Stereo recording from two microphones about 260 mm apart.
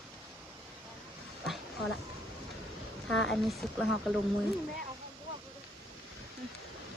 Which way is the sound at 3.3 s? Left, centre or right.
Centre.